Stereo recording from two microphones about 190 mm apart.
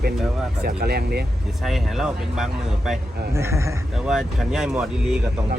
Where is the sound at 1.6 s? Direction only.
Centre (ahead or behind).